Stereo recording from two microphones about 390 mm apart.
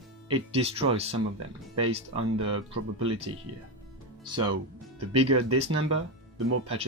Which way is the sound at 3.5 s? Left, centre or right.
Right.